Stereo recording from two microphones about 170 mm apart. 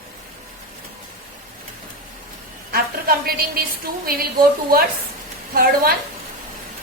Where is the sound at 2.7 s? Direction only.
60° right (ahead or behind).